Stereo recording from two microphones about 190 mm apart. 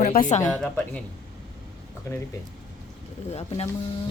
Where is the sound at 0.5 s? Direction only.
5° left (ahead or behind).